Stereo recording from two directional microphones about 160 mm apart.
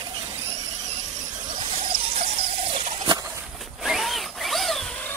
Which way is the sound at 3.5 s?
Centre (ahead or behind).